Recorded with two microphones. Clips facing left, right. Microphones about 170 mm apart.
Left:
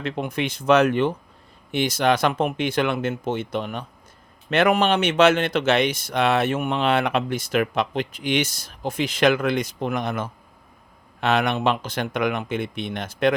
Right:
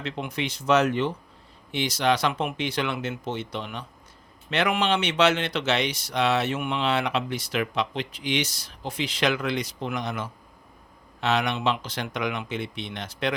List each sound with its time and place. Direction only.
0.0 s speech: 50° left (ahead or behind)